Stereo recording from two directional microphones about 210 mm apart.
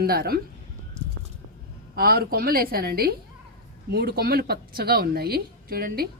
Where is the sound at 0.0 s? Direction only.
45° right (ahead or behind).